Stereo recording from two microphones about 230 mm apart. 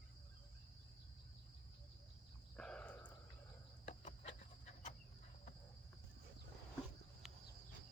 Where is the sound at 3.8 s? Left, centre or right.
Left.